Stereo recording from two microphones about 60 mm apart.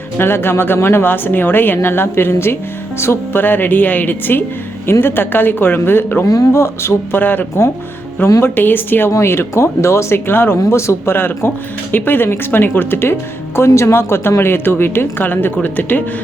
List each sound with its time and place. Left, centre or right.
0.2 s speech: left
3.4 s speech: left
6.5 s speech: left
7.2 s speech: left
9.0 s speech: left
10.2 s speech: left
10.7 s speech: left
13.7 s speech: left